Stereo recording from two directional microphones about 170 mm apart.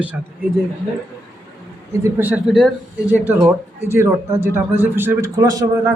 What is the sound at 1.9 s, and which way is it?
A man's voice, 15° right (ahead or behind).